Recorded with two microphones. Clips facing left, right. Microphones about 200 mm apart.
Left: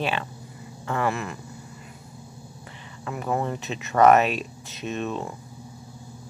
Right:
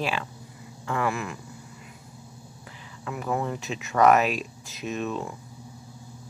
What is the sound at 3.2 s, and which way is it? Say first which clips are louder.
Speech: left 2 dB; 30° left (ahead or behind).